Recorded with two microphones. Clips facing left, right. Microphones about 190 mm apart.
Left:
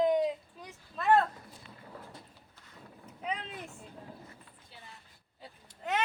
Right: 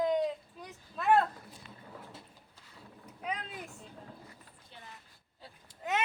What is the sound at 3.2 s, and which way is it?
Vehicle, centre (ahead or behind).